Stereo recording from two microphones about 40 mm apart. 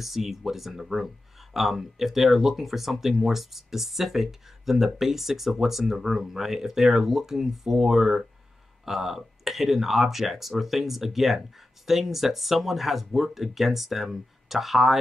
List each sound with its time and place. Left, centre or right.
0.0 s speech: centre